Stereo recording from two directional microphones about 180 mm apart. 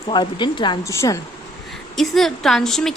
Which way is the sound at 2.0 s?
Centre (ahead or behind).